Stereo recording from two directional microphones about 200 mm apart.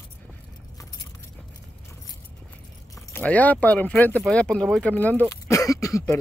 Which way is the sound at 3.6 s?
5° left (ahead or behind).